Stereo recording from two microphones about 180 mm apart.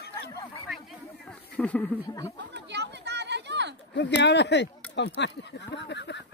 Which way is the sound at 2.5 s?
70° right (ahead or behind).